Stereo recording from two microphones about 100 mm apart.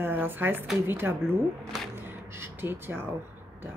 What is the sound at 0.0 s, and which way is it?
A woman's voice, 20° right (ahead or behind).